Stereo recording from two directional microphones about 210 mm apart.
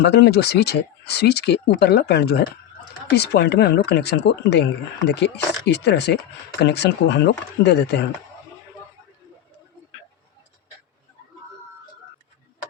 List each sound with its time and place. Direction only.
0.0 s speech: 55° left (ahead or behind)